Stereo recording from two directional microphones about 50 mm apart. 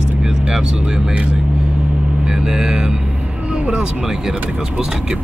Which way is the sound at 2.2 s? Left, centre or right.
Centre.